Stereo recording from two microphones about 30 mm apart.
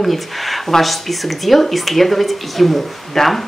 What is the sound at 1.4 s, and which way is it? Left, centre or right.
Speech, centre.